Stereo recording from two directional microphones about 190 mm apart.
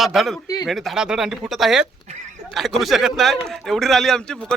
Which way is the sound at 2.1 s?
40° right (ahead or behind).